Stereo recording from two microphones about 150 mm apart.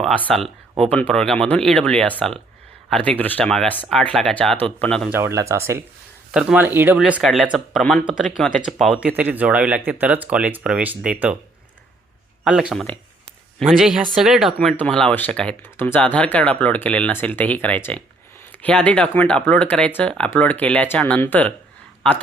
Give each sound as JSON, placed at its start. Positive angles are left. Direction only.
{"t": 0.3, "sound": "speech", "side_deg": 0}
{"t": 5.0, "sound": "speech", "side_deg": -15}
{"t": 9.0, "sound": "speech", "side_deg": -10}
{"t": 12.5, "sound": "speech", "side_deg": -5}